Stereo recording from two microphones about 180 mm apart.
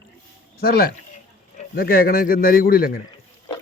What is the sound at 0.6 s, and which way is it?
A man's voice, 60° left (ahead or behind).